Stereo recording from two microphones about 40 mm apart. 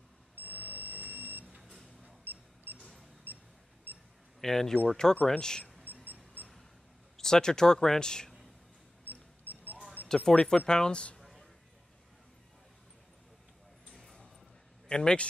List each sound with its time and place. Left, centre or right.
0.4 s smoke detector: right
2.2 s camera: right
4.4 s speech: centre
5.1 s speech: left
7.2 s speech: centre
10.0 s speech: centre
11.1 s a sound: centre
13.9 s a sound: centre
14.9 s speech: centre